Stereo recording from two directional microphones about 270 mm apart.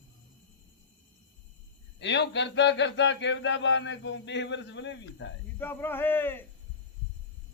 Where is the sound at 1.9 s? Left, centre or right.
Left.